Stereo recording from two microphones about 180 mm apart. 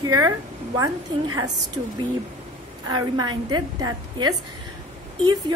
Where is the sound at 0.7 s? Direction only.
20° right (ahead or behind).